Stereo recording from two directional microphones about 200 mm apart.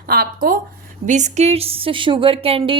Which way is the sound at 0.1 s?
45° right (ahead or behind).